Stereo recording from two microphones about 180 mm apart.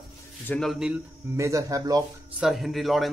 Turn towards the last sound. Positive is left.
turn(degrees=0)  # may be behind; listen again after turning